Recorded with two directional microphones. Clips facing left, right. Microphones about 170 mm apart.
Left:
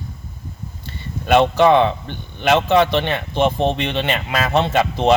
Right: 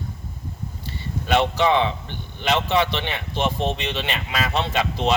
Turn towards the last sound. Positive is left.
turn(degrees=55)  # may be behind; listen again after turning